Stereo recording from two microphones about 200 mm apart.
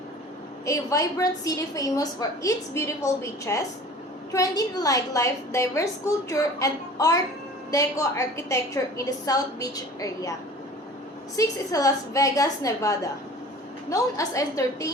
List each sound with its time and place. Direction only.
0.6 s a woman's voice: 15° left (ahead or behind)
11.3 s a woman's voice: 15° left (ahead or behind)